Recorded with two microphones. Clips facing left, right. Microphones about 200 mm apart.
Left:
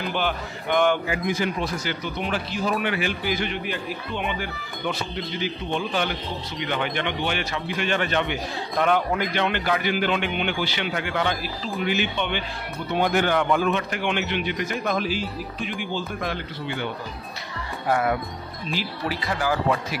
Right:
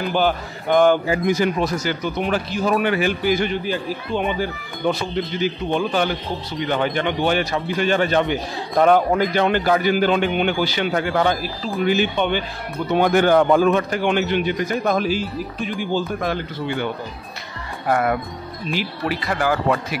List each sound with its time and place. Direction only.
0.7 s speech: 35° right (ahead or behind)
3.6 s speech: 35° right (ahead or behind)
17.8 s speech: 55° right (ahead or behind)